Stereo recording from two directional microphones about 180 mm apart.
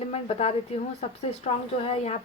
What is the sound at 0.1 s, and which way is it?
A woman's voice, 35° left (ahead or behind).